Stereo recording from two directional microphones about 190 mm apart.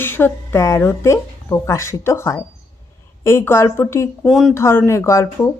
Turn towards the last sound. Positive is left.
turn(degrees=15)  # may be behind; listen again after turning